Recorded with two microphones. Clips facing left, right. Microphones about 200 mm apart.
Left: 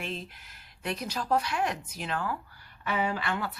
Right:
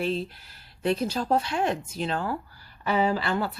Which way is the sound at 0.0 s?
35° right (ahead or behind).